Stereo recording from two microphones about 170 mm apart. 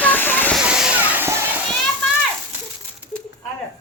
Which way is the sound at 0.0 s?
10° left (ahead or behind).